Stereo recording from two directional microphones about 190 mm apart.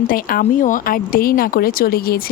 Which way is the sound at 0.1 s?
50° left (ahead or behind).